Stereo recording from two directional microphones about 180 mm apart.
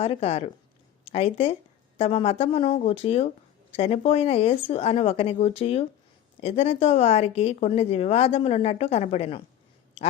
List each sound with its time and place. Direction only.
0.0 s a woman's voice: 35° left (ahead or behind)